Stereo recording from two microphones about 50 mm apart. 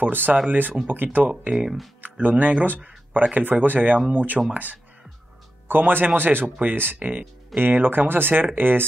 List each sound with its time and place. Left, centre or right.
0.0 s speech: right
1.5 s speech: centre
2.0 s speech: right
5.7 s speech: right